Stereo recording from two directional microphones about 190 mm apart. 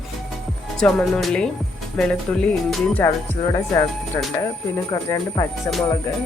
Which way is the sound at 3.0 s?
15° left (ahead or behind).